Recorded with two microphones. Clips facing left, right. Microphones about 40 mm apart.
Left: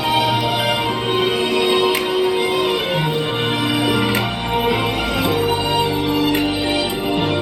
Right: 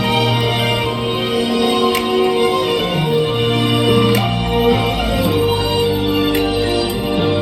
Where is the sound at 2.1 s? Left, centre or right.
Centre.